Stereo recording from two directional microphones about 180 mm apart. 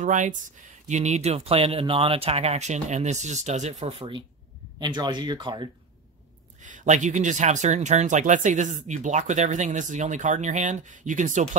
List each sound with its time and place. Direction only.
0.0 s speech: 45° right (ahead or behind)
4.7 s speech: 25° right (ahead or behind)
6.6 s speech: 45° right (ahead or behind)